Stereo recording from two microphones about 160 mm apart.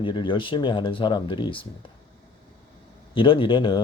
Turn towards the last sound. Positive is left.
turn(degrees=30)  # may be behind; listen again after turning